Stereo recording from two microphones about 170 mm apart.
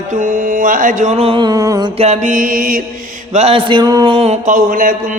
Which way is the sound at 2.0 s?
45° right (ahead or behind).